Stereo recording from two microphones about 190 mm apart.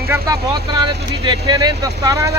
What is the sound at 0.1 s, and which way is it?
Speech, 20° right (ahead or behind).